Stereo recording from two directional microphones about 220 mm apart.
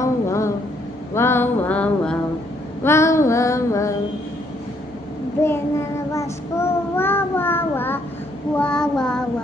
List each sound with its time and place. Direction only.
0.0 s a sound: 15° left (ahead or behind)
1.1 s music: 10° left (ahead or behind)
2.8 s female singing: 10° left (ahead or behind)
5.4 s child singing: 10° left (ahead or behind)